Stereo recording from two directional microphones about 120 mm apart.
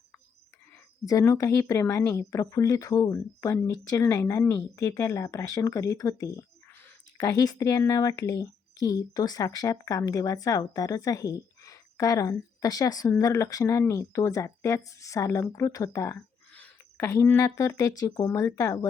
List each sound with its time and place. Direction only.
1.0 s speech: 30° left (ahead or behind)
16.5 s speech: 10° left (ahead or behind); by 18.9 s 30° left (ahead or behind)